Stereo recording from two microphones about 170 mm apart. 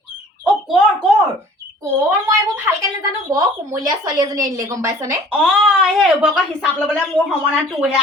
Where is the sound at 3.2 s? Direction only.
20° right (ahead or behind).